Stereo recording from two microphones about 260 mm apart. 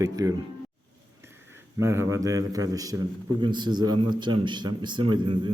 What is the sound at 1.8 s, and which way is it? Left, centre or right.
A man's voice, centre.